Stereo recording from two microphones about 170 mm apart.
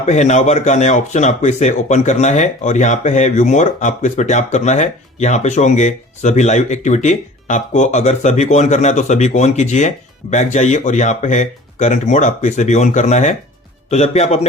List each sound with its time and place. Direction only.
0.0 s a man's voice: 45° left (ahead or behind)